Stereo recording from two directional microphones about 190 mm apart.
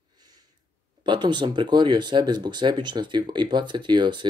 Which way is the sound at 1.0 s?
25° right (ahead or behind).